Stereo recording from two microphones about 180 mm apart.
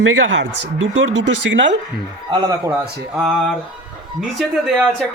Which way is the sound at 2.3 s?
20° right (ahead or behind).